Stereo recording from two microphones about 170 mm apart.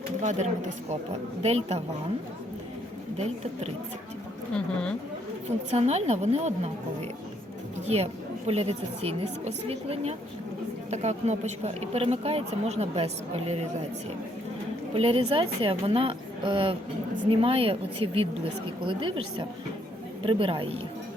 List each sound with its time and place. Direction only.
0.2 s speech: 45° right (ahead or behind)
3.2 s speech: 40° right (ahead or behind)
4.5 s speech: 5° left (ahead or behind)
5.7 s speech: 40° right (ahead or behind)
7.9 s speech: 40° right (ahead or behind)
14.9 s speech: 35° right (ahead or behind)